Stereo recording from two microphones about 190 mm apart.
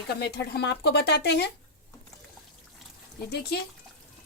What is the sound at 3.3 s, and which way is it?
Speech, 55° left (ahead or behind).